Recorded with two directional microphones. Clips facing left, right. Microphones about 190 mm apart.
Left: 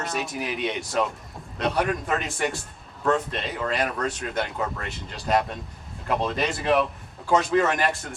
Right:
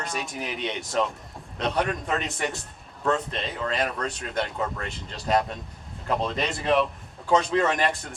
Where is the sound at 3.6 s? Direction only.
5° left (ahead or behind).